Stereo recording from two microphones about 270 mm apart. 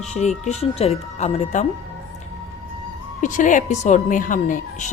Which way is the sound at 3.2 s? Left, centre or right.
Left.